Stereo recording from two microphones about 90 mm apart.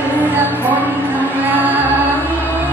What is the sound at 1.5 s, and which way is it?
Music, 20° right (ahead or behind).